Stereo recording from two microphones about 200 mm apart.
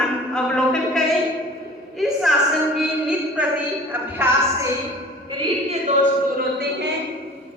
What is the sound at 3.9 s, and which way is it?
Music, 10° right (ahead or behind).